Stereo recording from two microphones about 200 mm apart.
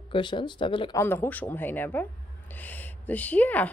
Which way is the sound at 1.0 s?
10° left (ahead or behind).